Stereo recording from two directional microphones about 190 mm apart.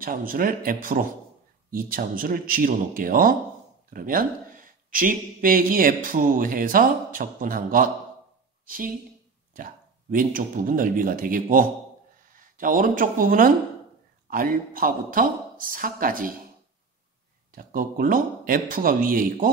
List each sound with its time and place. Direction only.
0.0 s speech: 50° right (ahead or behind)
10.1 s speech: 45° right (ahead or behind)
17.5 s speech: 50° right (ahead or behind)